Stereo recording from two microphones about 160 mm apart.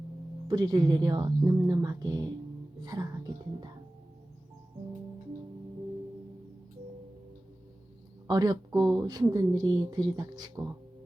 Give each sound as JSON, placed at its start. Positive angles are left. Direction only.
{"t": 0.4, "sound": "speech", "side_deg": -25}
{"t": 8.3, "sound": "speech", "side_deg": -25}